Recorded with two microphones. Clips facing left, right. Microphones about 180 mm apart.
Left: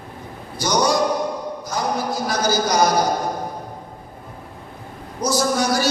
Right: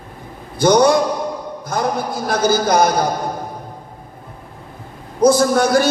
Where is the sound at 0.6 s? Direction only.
55° right (ahead or behind).